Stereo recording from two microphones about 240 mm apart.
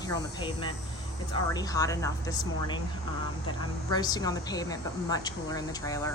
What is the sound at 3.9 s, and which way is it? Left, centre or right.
A woman's voice, centre.